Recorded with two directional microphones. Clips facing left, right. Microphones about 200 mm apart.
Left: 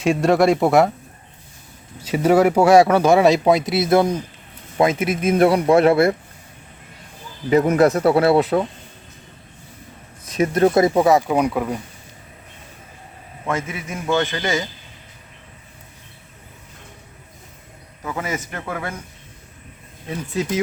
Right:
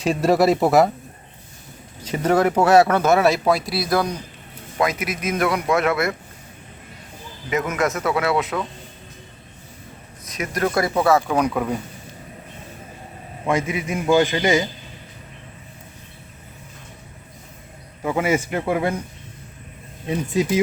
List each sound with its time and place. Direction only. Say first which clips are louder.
0.0 s speech: left 1 dB; centre (ahead or behind)
2.0 s speech: left 3 dB; 10° left (ahead or behind); by 6.1 s 30° left (ahead or behind)
7.5 s speech: left 8 dB; 35° left (ahead or behind)
10.2 s speech: left 7 dB; 30° left (ahead or behind); by 11.8 s 5° left (ahead or behind)
13.4 s a man's voice: right 3 dB; 15° right (ahead or behind)
18.5 s a man's voice: right 8 dB; 15° right (ahead or behind)
20.1 s a man's voice: right 3 dB; 15° right (ahead or behind)